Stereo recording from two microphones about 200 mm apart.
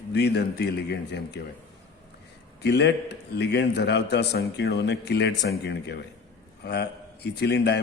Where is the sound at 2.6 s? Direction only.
55° left (ahead or behind).